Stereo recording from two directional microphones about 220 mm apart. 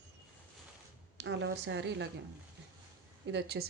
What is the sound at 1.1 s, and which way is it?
Speech, 55° right (ahead or behind).